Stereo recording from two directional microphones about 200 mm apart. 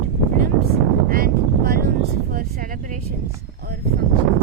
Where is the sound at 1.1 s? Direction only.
45° right (ahead or behind).